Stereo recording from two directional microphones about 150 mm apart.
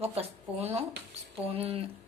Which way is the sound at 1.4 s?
40° right (ahead or behind).